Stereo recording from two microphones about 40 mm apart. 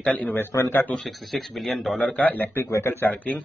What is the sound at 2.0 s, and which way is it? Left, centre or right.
Speech, left.